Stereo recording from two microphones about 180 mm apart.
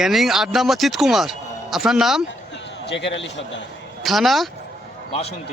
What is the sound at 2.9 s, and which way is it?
Speech, 80° left.